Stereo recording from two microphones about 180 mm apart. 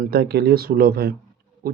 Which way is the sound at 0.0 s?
60° right (ahead or behind).